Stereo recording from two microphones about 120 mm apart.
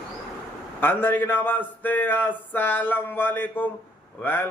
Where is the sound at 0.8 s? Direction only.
15° left (ahead or behind).